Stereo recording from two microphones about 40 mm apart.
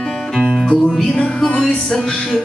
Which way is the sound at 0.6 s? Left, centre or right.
Centre.